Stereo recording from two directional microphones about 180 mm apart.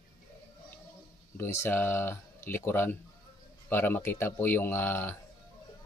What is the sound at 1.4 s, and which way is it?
Speech, 15° left (ahead or behind).